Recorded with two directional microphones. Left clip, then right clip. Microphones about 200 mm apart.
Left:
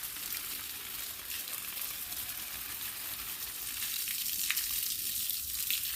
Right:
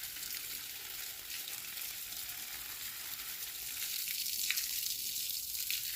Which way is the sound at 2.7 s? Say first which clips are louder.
Left 3 dB; 5° left (ahead or behind).